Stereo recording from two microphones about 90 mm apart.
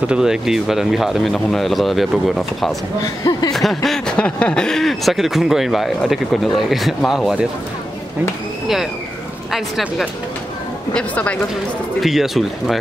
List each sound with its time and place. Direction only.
0.0 s speech: 10° right (ahead or behind)
3.0 s speech: 45° left (ahead or behind)
3.5 s speech: centre (ahead or behind)
4.2 s speech: 10° left (ahead or behind); by 7.4 s 5° right (ahead or behind)
9.5 s speech: 5° right (ahead or behind)
10.9 s speech: 10° left (ahead or behind)
12.0 s speech: centre (ahead or behind)